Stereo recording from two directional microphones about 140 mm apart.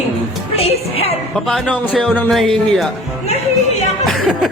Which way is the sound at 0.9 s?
45° left (ahead or behind).